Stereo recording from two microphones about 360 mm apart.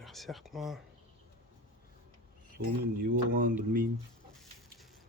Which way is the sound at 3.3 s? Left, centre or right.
Right.